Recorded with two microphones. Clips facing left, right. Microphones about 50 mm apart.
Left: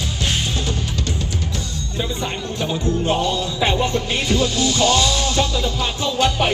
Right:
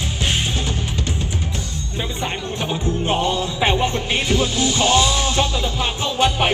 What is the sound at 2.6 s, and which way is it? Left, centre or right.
Music, right.